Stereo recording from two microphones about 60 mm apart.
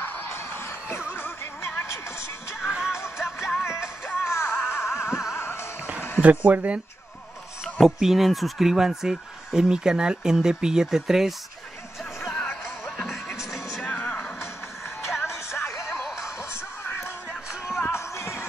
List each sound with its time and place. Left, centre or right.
0.0 s a sound: left
1.1 s music: left
2.6 s music: centre
3.0 s music: left
4.7 s a sound: left
5.3 s music: left
6.2 s speech: right
7.8 s speech: centre
12.8 s music: centre
13.8 s music: left
15.2 s music: left
16.8 s music: left